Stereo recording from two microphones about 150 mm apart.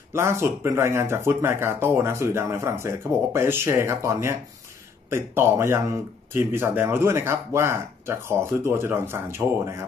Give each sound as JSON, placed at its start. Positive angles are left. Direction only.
{"t": 0.1, "sound": "speech", "side_deg": -15}